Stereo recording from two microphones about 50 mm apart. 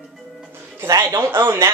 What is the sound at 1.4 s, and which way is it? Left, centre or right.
Speech, right.